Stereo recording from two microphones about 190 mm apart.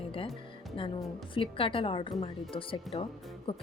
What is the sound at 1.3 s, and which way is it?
A woman's voice, 30° left (ahead or behind).